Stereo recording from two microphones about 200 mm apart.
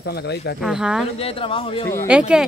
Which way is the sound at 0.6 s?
5° right (ahead or behind).